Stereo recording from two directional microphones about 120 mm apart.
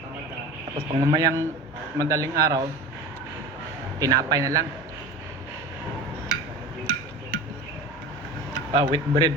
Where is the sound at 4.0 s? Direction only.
30° right (ahead or behind).